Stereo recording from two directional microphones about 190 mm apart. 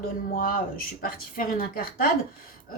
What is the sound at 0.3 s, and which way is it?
A woman's voice, 50° left (ahead or behind).